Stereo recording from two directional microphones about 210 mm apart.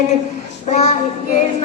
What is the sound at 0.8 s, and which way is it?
Child singing, 30° left (ahead or behind).